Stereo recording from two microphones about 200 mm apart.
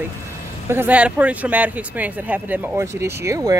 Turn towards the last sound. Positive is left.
turn(degrees=-15)  # may be behind; listen again after turning